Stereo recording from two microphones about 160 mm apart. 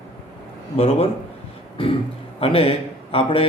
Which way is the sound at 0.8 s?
35° left (ahead or behind).